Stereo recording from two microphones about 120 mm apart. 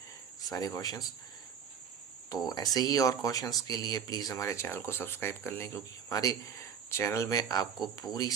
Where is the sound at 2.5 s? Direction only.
30° left (ahead or behind).